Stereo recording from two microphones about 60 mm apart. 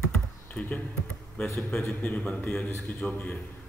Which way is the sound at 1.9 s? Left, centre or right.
Left.